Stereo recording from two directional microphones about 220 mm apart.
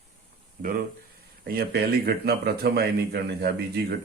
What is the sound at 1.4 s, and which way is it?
A man's voice, 45° right (ahead or behind).